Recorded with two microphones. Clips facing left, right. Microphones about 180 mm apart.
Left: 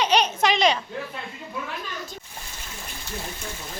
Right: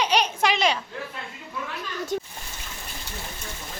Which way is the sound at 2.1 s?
60° right (ahead or behind).